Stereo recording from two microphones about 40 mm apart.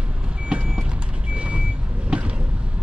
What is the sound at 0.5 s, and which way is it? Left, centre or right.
Vehicle, right.